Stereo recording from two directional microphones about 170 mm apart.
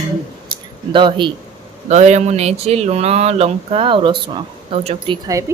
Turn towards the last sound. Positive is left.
turn(degrees=-20)  # may be behind; listen again after turning